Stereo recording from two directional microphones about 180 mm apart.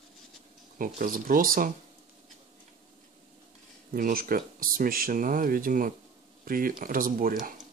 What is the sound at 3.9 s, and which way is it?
Speech, 55° right (ahead or behind).